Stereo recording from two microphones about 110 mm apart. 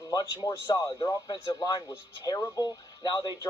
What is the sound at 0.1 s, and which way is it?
Speech, 45° left (ahead or behind).